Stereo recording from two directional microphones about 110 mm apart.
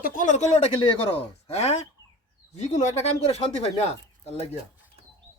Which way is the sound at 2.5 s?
90° left.